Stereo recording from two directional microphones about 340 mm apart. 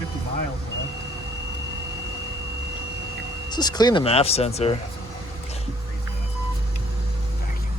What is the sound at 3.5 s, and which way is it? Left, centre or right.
Speech, centre.